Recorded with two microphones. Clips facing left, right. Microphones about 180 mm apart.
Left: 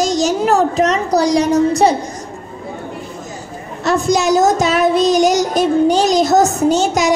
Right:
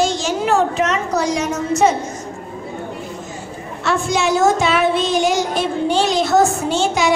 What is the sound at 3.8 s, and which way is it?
A child's voice, 40° left (ahead or behind).